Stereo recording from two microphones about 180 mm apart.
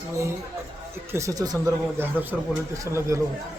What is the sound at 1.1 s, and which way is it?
Speech, 15° right (ahead or behind).